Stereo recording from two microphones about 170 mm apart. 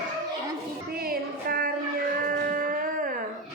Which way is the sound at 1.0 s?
60° right (ahead or behind).